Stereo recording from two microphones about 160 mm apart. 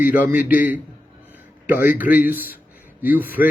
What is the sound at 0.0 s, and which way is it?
Speech, 10° right (ahead or behind).